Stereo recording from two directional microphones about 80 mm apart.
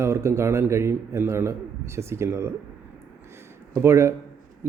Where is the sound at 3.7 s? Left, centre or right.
Right.